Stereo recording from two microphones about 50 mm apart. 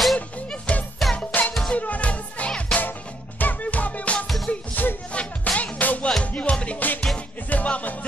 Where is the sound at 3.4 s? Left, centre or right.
Left.